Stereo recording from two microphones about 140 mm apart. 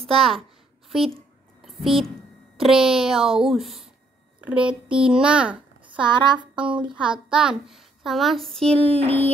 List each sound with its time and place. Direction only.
0.0 s a child's voice: centre (ahead or behind)
2.5 s a woman's voice: 5° right (ahead or behind)
5.9 s a woman's voice: 35° right (ahead or behind)
6.5 s a woman's voice: 10° right (ahead or behind); by 8.9 s 5° left (ahead or behind)